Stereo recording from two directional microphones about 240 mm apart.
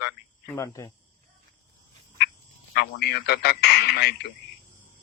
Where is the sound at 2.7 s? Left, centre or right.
Left.